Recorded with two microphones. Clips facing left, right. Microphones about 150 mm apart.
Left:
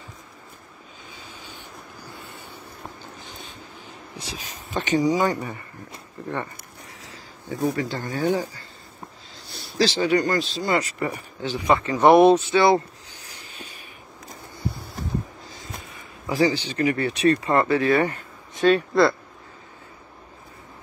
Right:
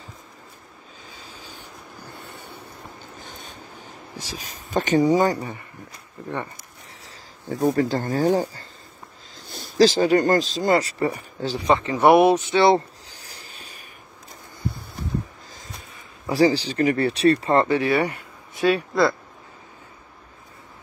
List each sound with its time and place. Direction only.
1.4 s vehicle: 40° right (ahead or behind)
3.2 s a sound: 50° right (ahead or behind)
4.4 s speech: 40° right (ahead or behind)
7.6 s speech: 45° right (ahead or behind)
11.7 s speech: 20° right (ahead or behind)
12.0 s speech: 10° right (ahead or behind)
12.4 s a sound: 25° right (ahead or behind)
16.3 s speech: 35° right (ahead or behind)
17.6 s speech: 15° right (ahead or behind)
18.6 s speech: centre (ahead or behind)